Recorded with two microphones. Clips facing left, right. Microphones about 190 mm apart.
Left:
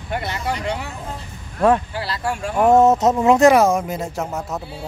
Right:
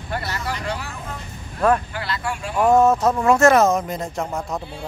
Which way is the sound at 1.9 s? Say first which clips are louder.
Left 2 dB; 30° left (ahead or behind).